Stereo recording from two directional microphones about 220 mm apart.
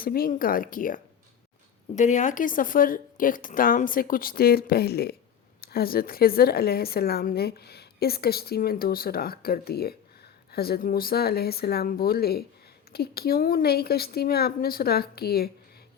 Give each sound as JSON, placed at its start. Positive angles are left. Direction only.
{"t": 0.0, "sound": "speech", "side_deg": 40}
{"t": 2.0, "sound": "a woman's voice", "side_deg": 35}